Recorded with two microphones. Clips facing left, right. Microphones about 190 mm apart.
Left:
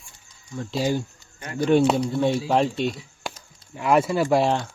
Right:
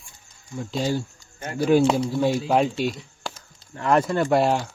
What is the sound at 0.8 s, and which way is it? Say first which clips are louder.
Speech: left 1 dB; 15° left (ahead or behind).